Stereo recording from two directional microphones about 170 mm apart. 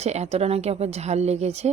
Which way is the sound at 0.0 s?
40° right (ahead or behind).